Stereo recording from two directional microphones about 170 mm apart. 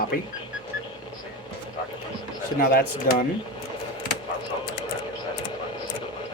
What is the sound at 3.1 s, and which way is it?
Speech, 55° left (ahead or behind).